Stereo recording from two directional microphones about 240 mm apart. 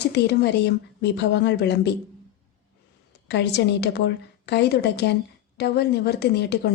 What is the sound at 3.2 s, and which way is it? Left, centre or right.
A woman's voice, left.